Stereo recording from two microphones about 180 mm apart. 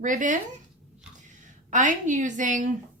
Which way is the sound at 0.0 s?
45° right (ahead or behind).